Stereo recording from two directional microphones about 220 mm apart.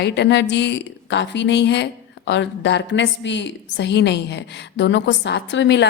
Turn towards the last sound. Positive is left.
turn(degrees=55)  # may be behind; listen again after turning